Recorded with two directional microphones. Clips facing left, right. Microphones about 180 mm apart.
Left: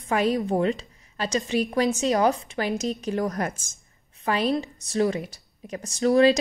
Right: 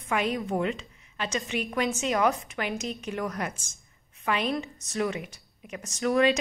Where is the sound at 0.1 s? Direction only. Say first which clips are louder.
Left 5 dB; 40° left (ahead or behind).